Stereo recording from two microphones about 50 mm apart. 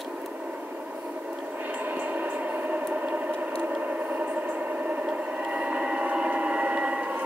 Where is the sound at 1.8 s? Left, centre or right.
Right.